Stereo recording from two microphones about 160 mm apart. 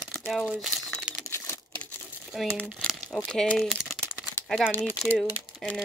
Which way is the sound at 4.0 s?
15° right (ahead or behind).